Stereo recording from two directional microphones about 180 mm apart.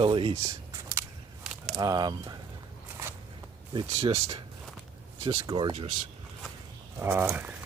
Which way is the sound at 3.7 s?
25° right (ahead or behind).